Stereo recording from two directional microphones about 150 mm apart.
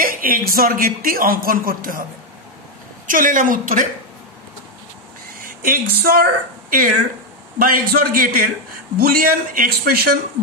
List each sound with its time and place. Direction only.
0.0 s a sound: 75° right (ahead or behind)
0.5 s speech: 70° right (ahead or behind)
3.1 s a woman's voice: 65° right (ahead or behind)
5.6 s a man's voice: 75° right (ahead or behind)